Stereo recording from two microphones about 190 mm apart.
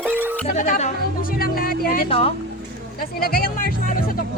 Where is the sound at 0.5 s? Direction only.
40° left (ahead or behind).